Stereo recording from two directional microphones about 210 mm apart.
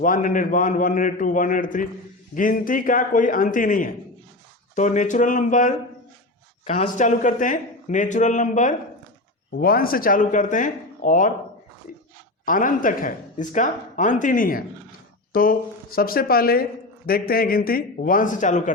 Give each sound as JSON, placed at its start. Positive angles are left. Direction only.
{"t": 0.0, "sound": "speech", "side_deg": 40}
{"t": 12.5, "sound": "speech", "side_deg": 40}